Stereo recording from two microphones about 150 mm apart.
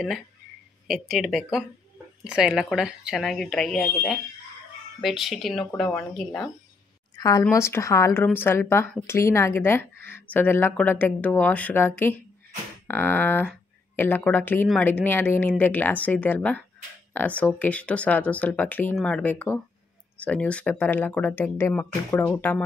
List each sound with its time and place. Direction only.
0.8 s speech: centre (ahead or behind)
7.2 s speech: 25° left (ahead or behind)